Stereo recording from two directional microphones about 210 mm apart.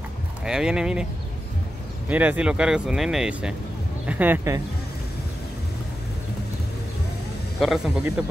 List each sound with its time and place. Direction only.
0.5 s speech: 5° right (ahead or behind)
2.0 s speech: 5° right (ahead or behind)
7.6 s speech: centre (ahead or behind)